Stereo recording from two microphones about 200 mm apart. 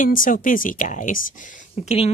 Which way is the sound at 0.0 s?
45° left (ahead or behind).